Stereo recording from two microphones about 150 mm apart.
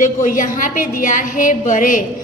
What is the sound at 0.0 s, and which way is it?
A woman's voice, 60° left (ahead or behind).